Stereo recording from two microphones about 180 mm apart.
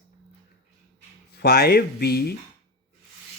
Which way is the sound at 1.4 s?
60° left (ahead or behind).